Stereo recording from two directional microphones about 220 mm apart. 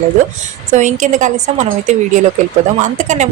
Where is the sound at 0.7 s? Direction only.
35° right (ahead or behind).